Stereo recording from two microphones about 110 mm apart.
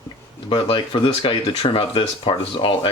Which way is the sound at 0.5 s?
50° left (ahead or behind).